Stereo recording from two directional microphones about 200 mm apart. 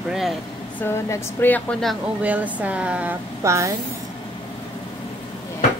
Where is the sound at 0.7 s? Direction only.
10° left (ahead or behind); by 3.7 s 15° right (ahead or behind).